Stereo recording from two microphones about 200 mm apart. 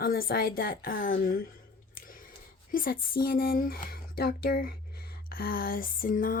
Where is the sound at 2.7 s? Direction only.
45° left (ahead or behind).